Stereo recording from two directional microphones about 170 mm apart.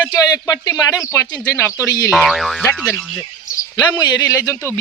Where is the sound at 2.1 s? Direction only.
Centre (ahead or behind).